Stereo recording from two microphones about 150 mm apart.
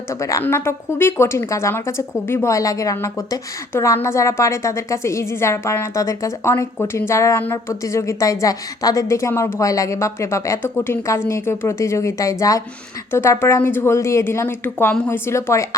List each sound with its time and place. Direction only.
0.1 s a woman's voice: 20° left (ahead or behind)